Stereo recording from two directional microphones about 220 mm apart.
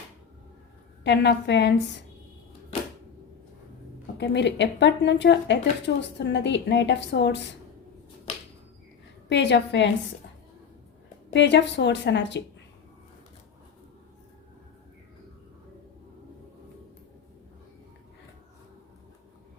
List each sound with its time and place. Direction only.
1.0 s a woman's voice: 50° left (ahead or behind)
4.2 s a woman's voice: 50° left (ahead or behind)
9.3 s a woman's voice: 55° left (ahead or behind)
11.3 s a woman's voice: 55° left (ahead or behind)